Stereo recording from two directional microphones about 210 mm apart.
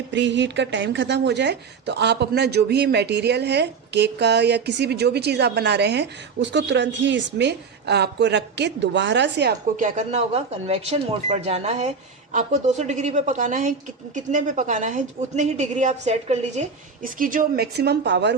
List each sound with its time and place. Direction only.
0.1 s a woman's voice: 60° right (ahead or behind)
9.7 s a woman's voice: 35° right (ahead or behind); by 18.3 s 55° right (ahead or behind)